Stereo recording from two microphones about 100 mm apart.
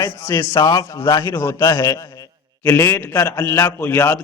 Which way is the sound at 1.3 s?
20° left (ahead or behind).